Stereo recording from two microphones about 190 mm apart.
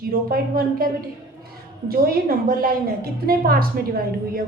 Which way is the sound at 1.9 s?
50° right (ahead or behind).